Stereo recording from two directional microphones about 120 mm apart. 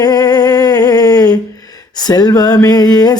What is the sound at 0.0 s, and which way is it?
Humming, 35° left (ahead or behind).